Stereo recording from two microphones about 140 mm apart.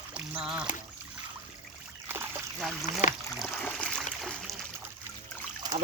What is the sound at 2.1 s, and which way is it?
Splash, 15° right (ahead or behind).